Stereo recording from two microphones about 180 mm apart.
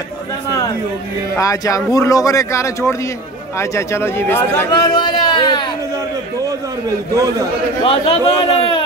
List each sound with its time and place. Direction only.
1.4 s a man's voice: 20° left (ahead or behind)
7.8 s a man's voice: 30° left (ahead or behind)